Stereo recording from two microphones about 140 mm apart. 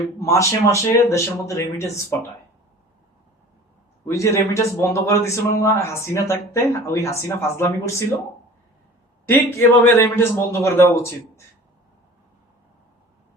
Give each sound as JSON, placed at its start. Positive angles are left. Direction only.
{"t": 0.2, "sound": "a man's voice", "side_deg": 20}
{"t": 4.1, "sound": "a man's voice", "side_deg": 20}
{"t": 9.2, "sound": "a man's voice", "side_deg": 15}